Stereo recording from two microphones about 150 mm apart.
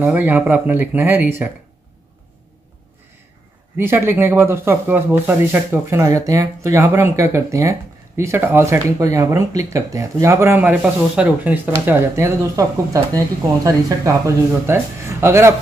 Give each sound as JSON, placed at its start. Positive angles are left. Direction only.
{"t": 0.0, "sound": "speech", "side_deg": -10}
{"t": 3.7, "sound": "speech", "side_deg": -15}